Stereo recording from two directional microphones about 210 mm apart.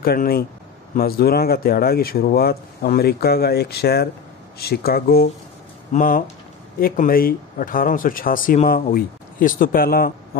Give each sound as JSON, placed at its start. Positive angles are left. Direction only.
{"t": 0.0, "sound": "speech", "side_deg": 45}